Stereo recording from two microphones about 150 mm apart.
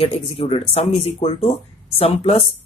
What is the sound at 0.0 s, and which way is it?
Speech, 40° left (ahead or behind).